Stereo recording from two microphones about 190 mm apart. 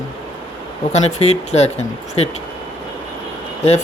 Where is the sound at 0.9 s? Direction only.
35° left (ahead or behind).